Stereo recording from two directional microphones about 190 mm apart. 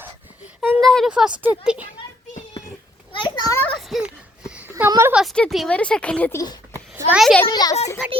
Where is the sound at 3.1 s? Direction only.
25° left (ahead or behind).